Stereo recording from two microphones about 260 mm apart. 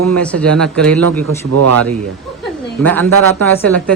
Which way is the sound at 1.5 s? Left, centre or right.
Right.